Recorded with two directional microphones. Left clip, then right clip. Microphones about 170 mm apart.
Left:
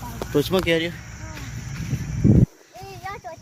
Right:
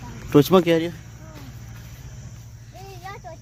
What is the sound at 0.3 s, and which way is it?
Speech, 50° right (ahead or behind).